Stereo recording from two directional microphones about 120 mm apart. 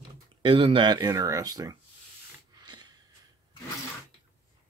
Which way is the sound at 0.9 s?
30° right (ahead or behind).